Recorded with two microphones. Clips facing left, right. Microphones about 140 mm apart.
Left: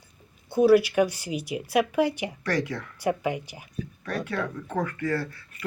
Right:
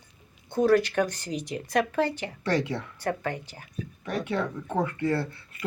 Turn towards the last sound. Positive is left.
turn(degrees=-25)  # may be behind; listen again after turning